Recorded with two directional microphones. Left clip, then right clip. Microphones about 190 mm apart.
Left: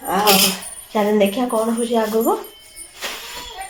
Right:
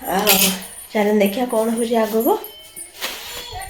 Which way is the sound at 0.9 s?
5° left (ahead or behind).